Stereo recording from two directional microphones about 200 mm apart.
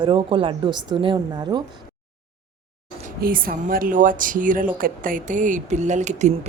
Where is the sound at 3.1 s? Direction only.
45° right (ahead or behind).